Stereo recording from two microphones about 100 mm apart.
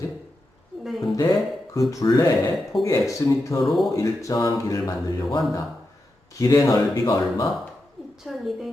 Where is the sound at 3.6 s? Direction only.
Centre (ahead or behind).